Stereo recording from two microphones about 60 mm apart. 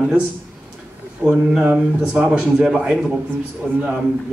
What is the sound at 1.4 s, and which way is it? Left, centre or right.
Speech, centre.